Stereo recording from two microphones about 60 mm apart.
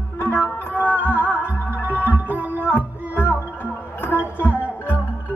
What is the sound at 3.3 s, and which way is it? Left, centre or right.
Music, left.